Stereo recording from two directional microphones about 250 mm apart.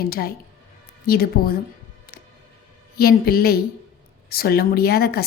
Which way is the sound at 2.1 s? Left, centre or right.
Left.